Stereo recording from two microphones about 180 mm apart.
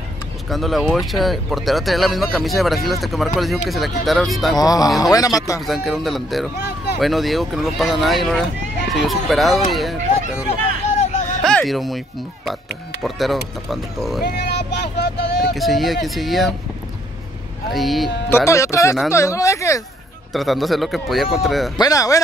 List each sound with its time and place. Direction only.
0.5 s speech: centre (ahead or behind)
4.6 s speech: 20° left (ahead or behind)
5.7 s speech: centre (ahead or behind)
11.4 s speech: centre (ahead or behind)
13.0 s speech: centre (ahead or behind)
14.2 s speech: 70° left (ahead or behind)
15.5 s speech: centre (ahead or behind)
17.7 s speech: centre (ahead or behind)
18.3 s speech: 15° left (ahead or behind)
20.3 s speech: centre (ahead or behind)
21.7 s speech: 20° left (ahead or behind)